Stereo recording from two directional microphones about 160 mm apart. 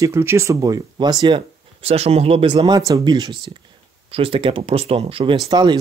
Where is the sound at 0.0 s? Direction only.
15° right (ahead or behind).